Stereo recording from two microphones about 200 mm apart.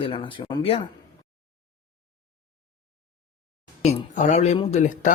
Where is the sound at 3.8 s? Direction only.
35° left (ahead or behind).